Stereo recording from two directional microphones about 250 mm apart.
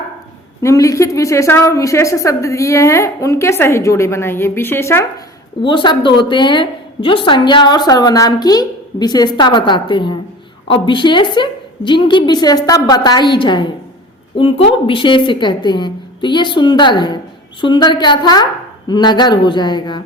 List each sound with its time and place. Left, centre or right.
0.6 s a woman's voice: centre